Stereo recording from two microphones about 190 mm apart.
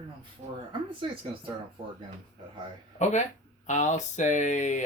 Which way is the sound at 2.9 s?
40° left (ahead or behind).